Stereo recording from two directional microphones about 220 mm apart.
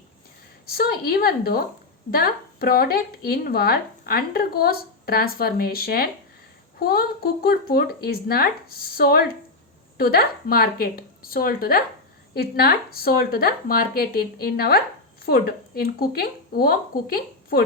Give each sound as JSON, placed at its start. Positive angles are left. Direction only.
{"t": 0.7, "sound": "a woman's voice", "side_deg": 45}